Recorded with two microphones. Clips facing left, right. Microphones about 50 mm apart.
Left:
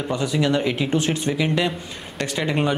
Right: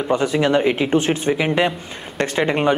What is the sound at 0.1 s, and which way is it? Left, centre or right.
Speech, right.